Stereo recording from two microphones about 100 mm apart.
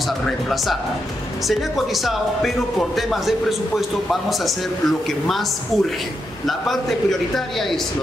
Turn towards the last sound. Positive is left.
turn(degrees=0)  # may be behind; listen again after turning